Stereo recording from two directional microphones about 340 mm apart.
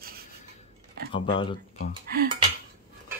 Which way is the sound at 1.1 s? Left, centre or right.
Centre.